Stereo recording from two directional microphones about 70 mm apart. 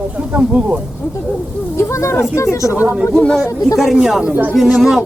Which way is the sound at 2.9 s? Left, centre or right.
Centre.